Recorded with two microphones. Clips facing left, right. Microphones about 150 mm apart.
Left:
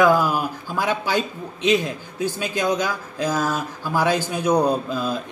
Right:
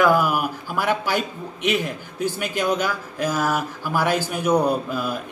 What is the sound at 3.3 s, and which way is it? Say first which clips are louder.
Speech: right 1 dB; 10° right (ahead or behind).